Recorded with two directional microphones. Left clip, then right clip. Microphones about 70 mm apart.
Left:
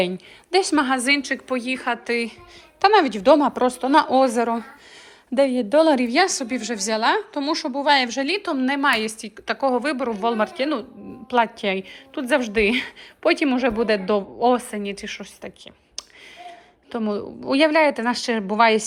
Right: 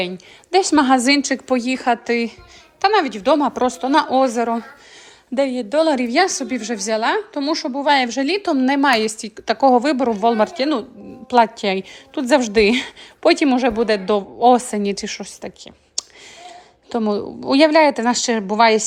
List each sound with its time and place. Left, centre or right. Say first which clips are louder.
0.5 s a woman's voice: right 4 dB; right
0.9 s a woman's voice: right 5 dB; right
2.8 s a woman's voice: left 1 dB; centre
3.3 s a woman's voice: right 1 dB; right
5.5 s a woman's voice: even; centre
6.1 s a woman's voice: right 2 dB; right
8.4 s a woman's voice: right 5 dB; right
14.5 s a woman's voice: right 6 dB; right
16.0 s speech: right 7 dB; right